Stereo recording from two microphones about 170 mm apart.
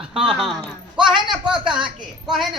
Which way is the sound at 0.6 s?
30° right (ahead or behind).